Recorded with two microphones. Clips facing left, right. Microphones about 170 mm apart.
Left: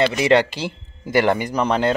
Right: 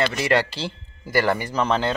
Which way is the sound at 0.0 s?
20° left (ahead or behind).